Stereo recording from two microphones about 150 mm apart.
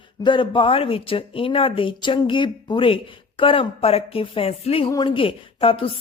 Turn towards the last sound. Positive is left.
turn(degrees=35)  # may be behind; listen again after turning